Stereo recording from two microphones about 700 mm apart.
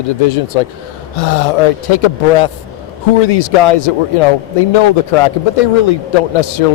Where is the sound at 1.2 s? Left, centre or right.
Left.